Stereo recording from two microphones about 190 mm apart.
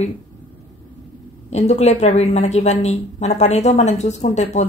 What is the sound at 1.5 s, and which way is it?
A woman's voice, 35° left (ahead or behind).